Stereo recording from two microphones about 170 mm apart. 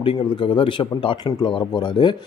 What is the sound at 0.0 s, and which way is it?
Speech, 30° left (ahead or behind).